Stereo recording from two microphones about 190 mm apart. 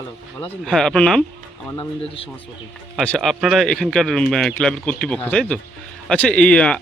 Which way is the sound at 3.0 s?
5° left (ahead or behind).